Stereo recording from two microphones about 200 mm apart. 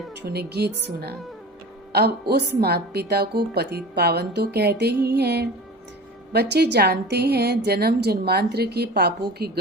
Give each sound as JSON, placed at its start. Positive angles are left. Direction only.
{"t": 0.2, "sound": "a woman's voice", "side_deg": -55}